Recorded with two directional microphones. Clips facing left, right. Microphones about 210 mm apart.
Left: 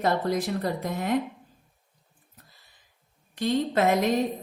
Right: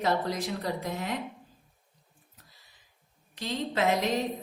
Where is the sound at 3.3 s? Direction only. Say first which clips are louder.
Left 6 dB; 50° left (ahead or behind).